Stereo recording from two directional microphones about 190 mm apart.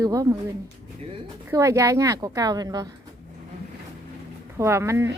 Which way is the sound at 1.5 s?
15° right (ahead or behind).